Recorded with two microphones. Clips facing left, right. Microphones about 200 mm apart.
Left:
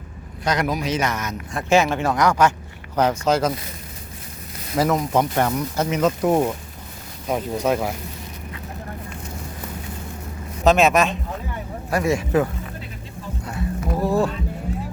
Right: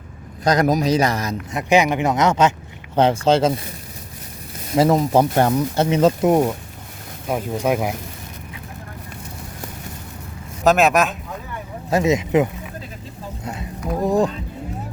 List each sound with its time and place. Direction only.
0.4 s speech: 40° right (ahead or behind)
1.5 s speech: 15° right (ahead or behind)
4.7 s speech: 30° right (ahead or behind)
6.2 s speech: 15° right (ahead or behind)
10.6 s speech: centre (ahead or behind)
11.9 s speech: 20° right (ahead or behind)
13.4 s a sound: 20° right (ahead or behind)
14.0 s music: 15° right (ahead or behind)